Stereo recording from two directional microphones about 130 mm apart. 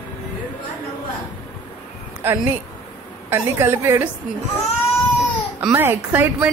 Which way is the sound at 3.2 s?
20° right (ahead or behind).